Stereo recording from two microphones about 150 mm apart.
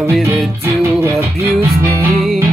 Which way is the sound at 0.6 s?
20° right (ahead or behind).